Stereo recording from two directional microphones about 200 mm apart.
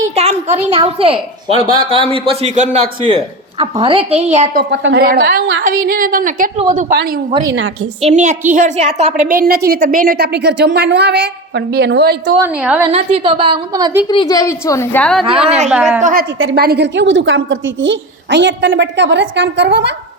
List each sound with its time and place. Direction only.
0.2 s a woman's voice: 30° right (ahead or behind)
4.5 s a woman's voice: 60° right (ahead or behind); by 6.7 s 40° right (ahead or behind)
8.0 s a woman's voice: 35° right (ahead or behind)
9.3 s a woman's voice: 50° right (ahead or behind)
12.4 s a woman's voice: 5° right (ahead or behind)
12.9 s a man's voice: 30° right (ahead or behind)
14.1 s a woman's voice: 20° left (ahead or behind)
15.2 s a man's voice: 30° right (ahead or behind)
15.7 s a woman's voice: 5° right (ahead or behind)
16.0 s a woman's voice: 40° right (ahead or behind)
16.6 s a woman's voice: 55° right (ahead or behind)